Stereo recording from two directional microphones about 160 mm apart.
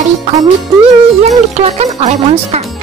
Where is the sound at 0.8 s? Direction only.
40° right (ahead or behind).